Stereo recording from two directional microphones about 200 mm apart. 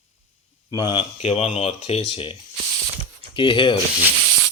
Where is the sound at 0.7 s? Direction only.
20° left (ahead or behind).